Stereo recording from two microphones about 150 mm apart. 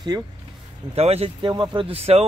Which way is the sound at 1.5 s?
30° right (ahead or behind).